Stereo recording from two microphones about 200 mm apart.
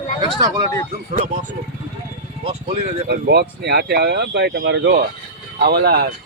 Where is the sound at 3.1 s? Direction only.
55° right (ahead or behind).